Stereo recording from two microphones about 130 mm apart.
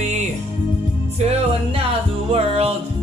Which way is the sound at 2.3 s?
50° right (ahead or behind).